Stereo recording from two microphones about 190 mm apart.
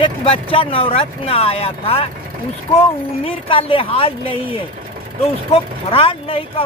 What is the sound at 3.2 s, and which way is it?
Speech, 30° left (ahead or behind).